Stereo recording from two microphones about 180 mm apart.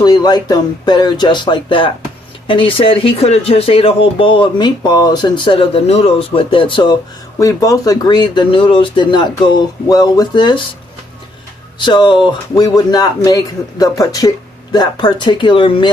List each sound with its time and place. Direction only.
0.0 s speech: 20° left (ahead or behind)
11.8 s speech: 25° left (ahead or behind)